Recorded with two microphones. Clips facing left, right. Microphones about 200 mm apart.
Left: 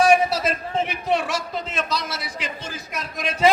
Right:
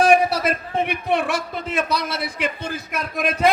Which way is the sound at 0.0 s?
60° right (ahead or behind).